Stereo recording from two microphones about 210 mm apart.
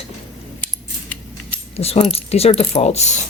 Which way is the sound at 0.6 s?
10° left (ahead or behind).